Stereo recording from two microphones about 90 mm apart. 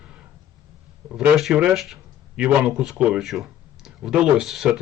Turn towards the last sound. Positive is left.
turn(degrees=-5)  # may be behind; listen again after turning